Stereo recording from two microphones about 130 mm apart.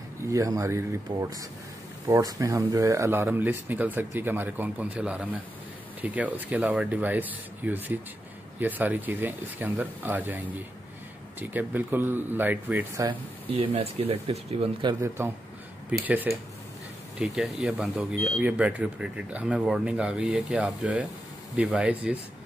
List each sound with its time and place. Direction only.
0.3 s speech: 25° right (ahead or behind)
13.5 s speech: 50° right (ahead or behind)
15.0 s speech: 20° right (ahead or behind)